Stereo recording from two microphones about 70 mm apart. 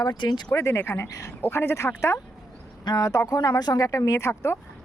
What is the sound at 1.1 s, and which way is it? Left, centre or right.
Speech, left.